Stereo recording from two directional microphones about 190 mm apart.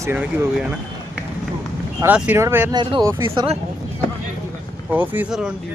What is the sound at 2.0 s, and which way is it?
Speech, 10° right (ahead or behind).